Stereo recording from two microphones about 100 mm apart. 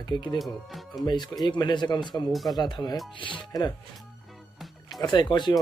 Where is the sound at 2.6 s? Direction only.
45° left (ahead or behind).